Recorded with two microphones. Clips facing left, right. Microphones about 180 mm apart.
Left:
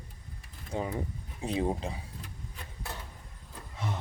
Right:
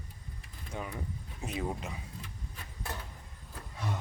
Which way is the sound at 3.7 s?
20° left (ahead or behind).